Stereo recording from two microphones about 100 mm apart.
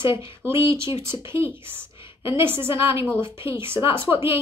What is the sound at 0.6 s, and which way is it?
A woman's voice, 25° right (ahead or behind).